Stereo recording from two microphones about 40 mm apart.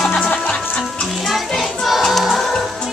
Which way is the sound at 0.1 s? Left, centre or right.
Left.